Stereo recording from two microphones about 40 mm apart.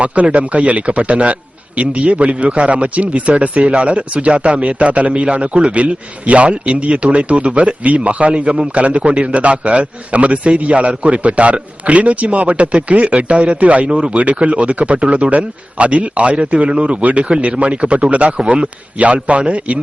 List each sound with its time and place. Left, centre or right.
0.0 s a man's voice: right